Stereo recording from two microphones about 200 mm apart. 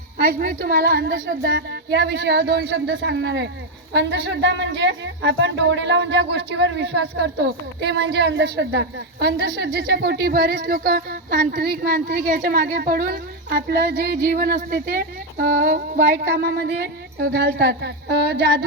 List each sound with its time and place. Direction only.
0.3 s a woman's voice: 50° right (ahead or behind)